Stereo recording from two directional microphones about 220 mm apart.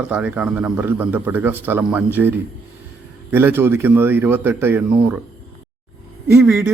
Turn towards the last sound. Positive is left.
turn(degrees=-10)  # may be behind; listen again after turning